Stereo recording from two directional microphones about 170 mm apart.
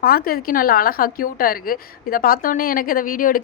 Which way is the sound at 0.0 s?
60° left (ahead or behind).